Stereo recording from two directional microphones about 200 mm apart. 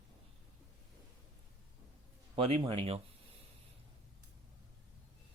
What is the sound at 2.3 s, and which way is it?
Speech, 25° right (ahead or behind).